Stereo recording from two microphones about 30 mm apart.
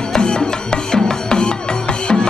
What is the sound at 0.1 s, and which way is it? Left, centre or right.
Music, left.